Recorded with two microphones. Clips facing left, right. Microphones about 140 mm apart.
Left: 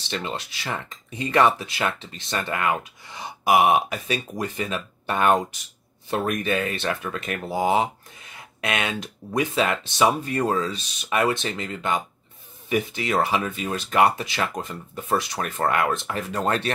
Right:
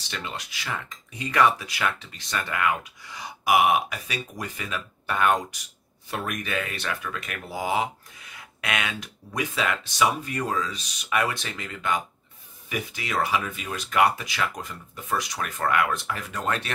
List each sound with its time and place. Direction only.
0.1 s speech: 30° left (ahead or behind)